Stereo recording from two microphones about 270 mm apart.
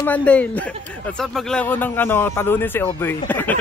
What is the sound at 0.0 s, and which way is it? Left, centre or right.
A woman's voice, centre.